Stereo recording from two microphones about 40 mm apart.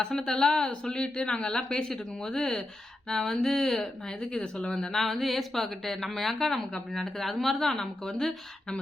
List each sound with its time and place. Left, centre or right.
0.2 s a woman's voice: centre
3.1 s a sound: centre
4.9 s a woman's voice: centre